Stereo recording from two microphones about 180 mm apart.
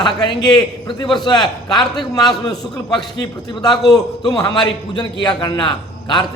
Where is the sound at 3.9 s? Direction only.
20° left (ahead or behind).